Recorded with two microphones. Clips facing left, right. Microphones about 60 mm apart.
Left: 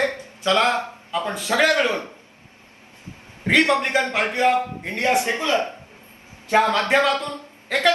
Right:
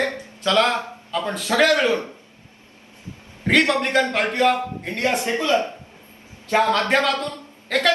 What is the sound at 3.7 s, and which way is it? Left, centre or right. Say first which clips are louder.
A man's voice: even; left.